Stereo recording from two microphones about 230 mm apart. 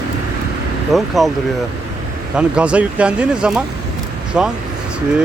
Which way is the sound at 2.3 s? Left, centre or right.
Centre.